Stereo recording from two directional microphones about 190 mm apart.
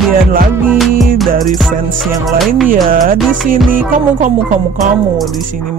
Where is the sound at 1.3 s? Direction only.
45° right (ahead or behind).